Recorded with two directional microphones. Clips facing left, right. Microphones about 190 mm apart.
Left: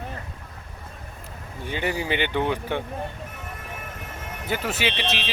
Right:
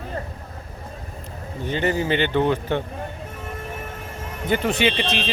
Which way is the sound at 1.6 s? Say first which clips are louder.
Right 5 dB; 10° left (ahead or behind).